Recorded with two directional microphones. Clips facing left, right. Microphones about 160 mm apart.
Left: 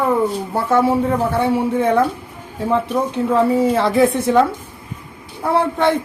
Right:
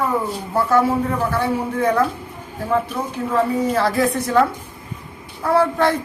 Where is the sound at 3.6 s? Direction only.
25° left (ahead or behind).